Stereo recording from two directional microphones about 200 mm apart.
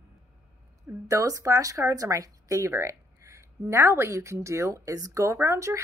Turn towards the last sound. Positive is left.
turn(degrees=-15)  # may be behind; listen again after turning